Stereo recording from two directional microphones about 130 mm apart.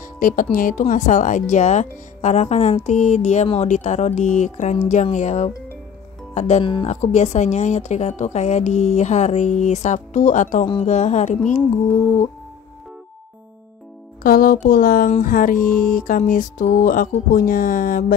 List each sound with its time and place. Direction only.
0.0 s speech: 90° left; by 6.6 s 60° left (ahead or behind)
6.6 s speech: 40° left (ahead or behind)
6.9 s speech: 65° left (ahead or behind)
14.2 s speech: 90° left